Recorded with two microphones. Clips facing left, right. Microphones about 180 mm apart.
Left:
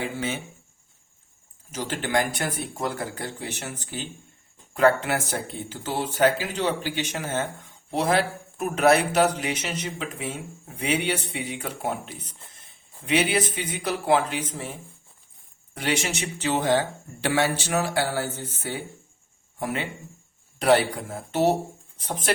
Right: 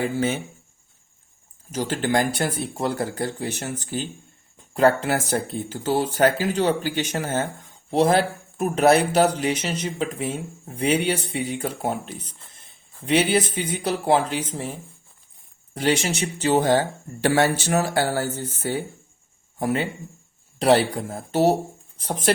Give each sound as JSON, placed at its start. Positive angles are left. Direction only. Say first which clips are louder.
{"t": 1.7, "sound": "speech", "louder": "right 3 dB", "side_deg": -40}
{"t": 13.1, "sound": "speech", "louder": "right 3 dB", "side_deg": -35}
{"t": 15.7, "sound": "speech", "louder": "right 5 dB", "side_deg": -35}